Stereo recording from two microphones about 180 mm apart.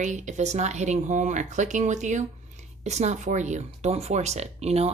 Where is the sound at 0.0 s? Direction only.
40° right (ahead or behind).